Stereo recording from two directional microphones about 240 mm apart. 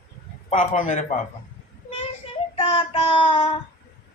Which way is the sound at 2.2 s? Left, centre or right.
Left.